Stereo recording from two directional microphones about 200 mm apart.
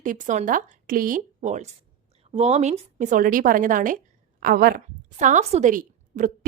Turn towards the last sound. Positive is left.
turn(degrees=-40)  # may be behind; listen again after turning